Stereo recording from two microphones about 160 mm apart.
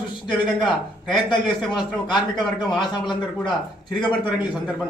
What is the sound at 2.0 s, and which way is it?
A man's voice, 30° left (ahead or behind).